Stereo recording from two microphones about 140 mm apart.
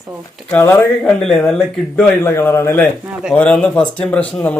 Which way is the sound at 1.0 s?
5° left (ahead or behind).